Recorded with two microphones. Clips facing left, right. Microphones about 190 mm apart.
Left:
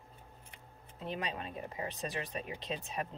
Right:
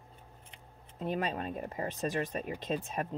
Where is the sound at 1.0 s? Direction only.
45° right (ahead or behind).